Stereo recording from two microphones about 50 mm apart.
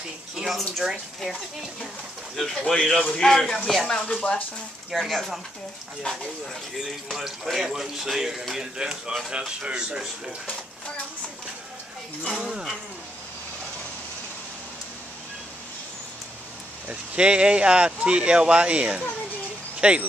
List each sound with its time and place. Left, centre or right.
0.4 s speech: centre
2.3 s speech: centre
4.1 s speech: left
4.9 s speech: centre
7.1 s a man's voice: centre
9.6 s speech: centre
12.4 s a man's voice: centre
16.9 s speech: centre